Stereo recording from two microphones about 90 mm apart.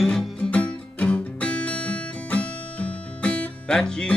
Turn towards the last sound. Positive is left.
turn(degrees=10)  # may be behind; listen again after turning